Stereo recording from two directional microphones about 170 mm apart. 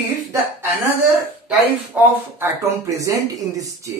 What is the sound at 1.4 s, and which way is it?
Speech, 10° right (ahead or behind).